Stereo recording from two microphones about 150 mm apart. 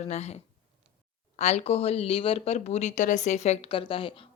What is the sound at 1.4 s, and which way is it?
Speech, 45° left (ahead or behind).